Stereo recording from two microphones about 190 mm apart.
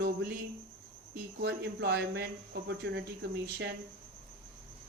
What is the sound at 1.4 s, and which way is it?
Speech, 60° right (ahead or behind).